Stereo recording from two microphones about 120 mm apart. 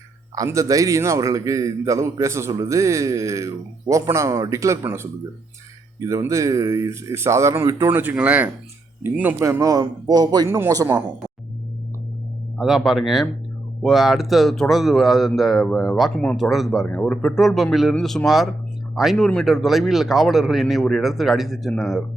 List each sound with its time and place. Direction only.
0.3 s a man's voice: 25° right (ahead or behind)
12.5 s a man's voice: 5° right (ahead or behind)
16.2 s speech: 10° left (ahead or behind)
16.5 s a man's voice: centre (ahead or behind)